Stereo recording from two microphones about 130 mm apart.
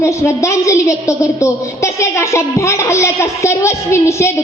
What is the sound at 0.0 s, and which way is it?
A woman's voice, 20° left (ahead or behind).